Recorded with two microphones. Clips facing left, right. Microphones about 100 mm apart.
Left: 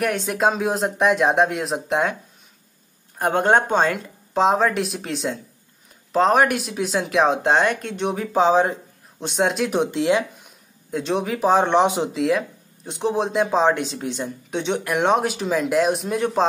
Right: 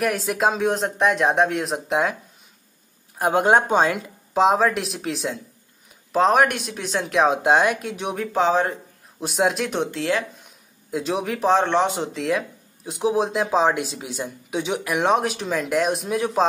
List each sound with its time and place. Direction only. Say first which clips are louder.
0.0 s speech: left 1 dB; centre (ahead or behind)
3.2 s speech: even; 5° right (ahead or behind)
8.3 s speech: left 3 dB; 15° left (ahead or behind)
9.2 s speech: even; centre (ahead or behind)
9.8 s speech: left 4 dB; 20° left (ahead or behind)
10.4 s a sound: left 1 dB; 5° right (ahead or behind)
11.6 s speech: left 3 dB; 15° left (ahead or behind)
12.2 s speech: left 3 dB; centre (ahead or behind)